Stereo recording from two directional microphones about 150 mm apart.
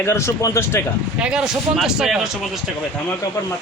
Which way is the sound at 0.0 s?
20° left (ahead or behind).